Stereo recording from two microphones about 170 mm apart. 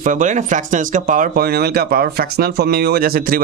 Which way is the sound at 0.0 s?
50° right (ahead or behind).